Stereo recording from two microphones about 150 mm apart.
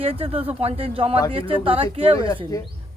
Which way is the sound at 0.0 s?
40° right (ahead or behind).